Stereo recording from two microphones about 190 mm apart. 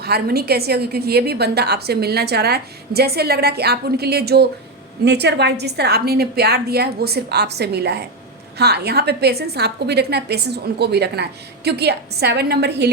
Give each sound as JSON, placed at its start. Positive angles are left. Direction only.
{"t": 0.0, "sound": "a woman's voice", "side_deg": -55}